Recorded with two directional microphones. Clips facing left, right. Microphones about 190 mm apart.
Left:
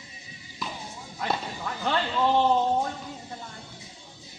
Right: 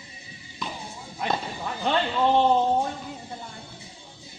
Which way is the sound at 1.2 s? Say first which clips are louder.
Right 2 dB; 25° right (ahead or behind).